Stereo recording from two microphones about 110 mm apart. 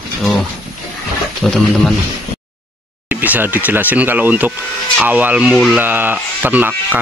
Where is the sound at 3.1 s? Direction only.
15° right (ahead or behind).